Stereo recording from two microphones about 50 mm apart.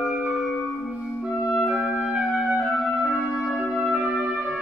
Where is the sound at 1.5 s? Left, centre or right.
Centre.